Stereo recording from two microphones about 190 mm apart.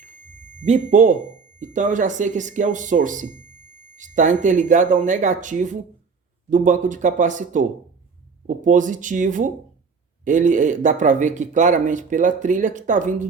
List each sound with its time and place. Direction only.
0.6 s speech: 35° right (ahead or behind)